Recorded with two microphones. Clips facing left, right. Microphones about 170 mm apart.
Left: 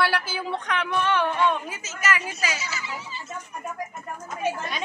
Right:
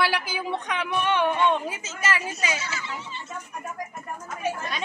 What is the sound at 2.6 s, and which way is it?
Speech, 10° left (ahead or behind).